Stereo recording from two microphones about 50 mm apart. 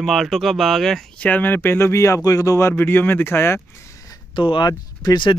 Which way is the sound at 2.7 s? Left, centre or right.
Left.